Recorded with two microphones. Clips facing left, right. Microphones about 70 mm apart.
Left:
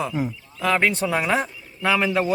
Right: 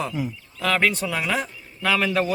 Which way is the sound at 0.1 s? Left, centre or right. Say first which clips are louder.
Left 2 dB; left.